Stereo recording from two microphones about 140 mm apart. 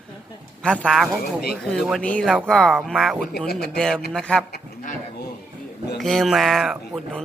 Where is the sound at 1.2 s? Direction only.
90° left.